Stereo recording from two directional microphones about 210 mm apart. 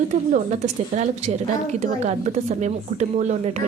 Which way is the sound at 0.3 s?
35° right (ahead or behind).